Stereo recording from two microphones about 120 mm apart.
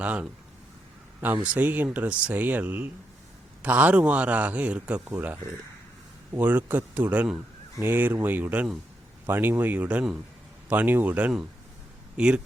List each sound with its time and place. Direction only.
0.0 s a man's voice: 10° right (ahead or behind)
1.4 s a man's voice: 10° right (ahead or behind)